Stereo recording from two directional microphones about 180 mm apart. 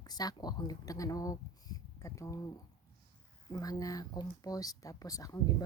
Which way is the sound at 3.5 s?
20° left (ahead or behind).